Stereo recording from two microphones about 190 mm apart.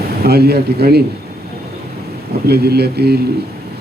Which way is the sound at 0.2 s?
55° right (ahead or behind).